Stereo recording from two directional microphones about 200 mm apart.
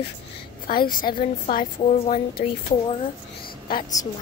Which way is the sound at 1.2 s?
40° left (ahead or behind).